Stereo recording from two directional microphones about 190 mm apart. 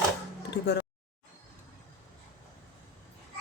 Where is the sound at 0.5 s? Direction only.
60° left (ahead or behind).